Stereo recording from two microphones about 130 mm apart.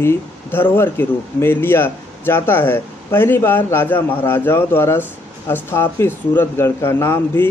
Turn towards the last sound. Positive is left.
turn(degrees=20)  # may be behind; listen again after turning